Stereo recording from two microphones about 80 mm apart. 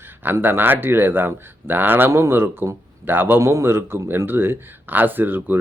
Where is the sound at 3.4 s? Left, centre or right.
Right.